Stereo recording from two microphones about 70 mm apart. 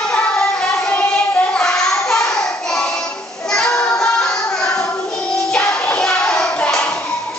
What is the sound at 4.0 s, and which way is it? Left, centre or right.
Music, centre.